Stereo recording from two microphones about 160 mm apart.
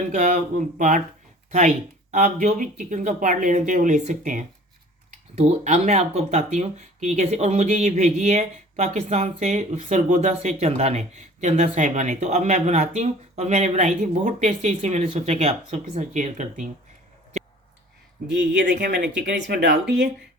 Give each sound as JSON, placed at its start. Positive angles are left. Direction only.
{"t": 0.1, "sound": "speech", "side_deg": -50}
{"t": 18.3, "sound": "speech", "side_deg": -90}